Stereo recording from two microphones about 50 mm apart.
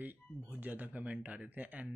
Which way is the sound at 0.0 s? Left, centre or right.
Right.